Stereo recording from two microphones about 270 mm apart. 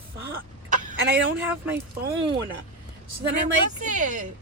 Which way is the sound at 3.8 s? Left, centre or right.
Right.